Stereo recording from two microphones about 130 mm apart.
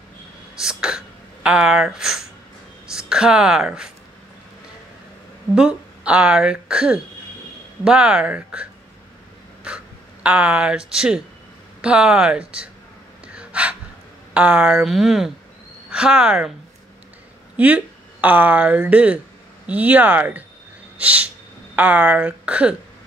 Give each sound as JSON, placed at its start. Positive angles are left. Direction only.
{"t": 0.6, "sound": "speech", "side_deg": -5}
{"t": 5.5, "sound": "speech", "side_deg": -5}
{"t": 9.7, "sound": "crow", "side_deg": -5}
{"t": 10.2, "sound": "speech", "side_deg": -10}
{"t": 13.4, "sound": "gasp", "side_deg": -10}
{"t": 14.3, "sound": "speech", "side_deg": -10}
{"t": 17.6, "sound": "speech", "side_deg": -10}